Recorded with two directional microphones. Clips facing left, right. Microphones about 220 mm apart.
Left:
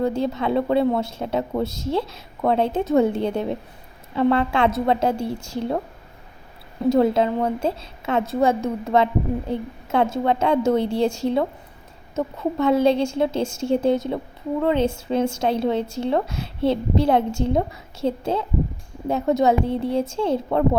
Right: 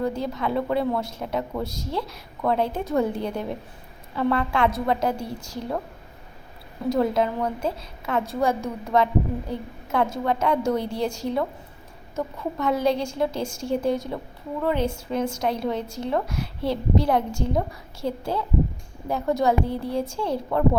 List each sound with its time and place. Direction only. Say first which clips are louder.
0.0 s a woman's voice: left 4 dB; 25° left (ahead or behind)
6.9 s a woman's voice: left 4 dB; 25° left (ahead or behind)